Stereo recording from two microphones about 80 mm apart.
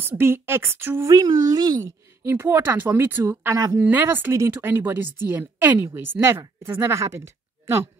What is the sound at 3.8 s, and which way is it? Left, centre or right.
A woman's voice, right.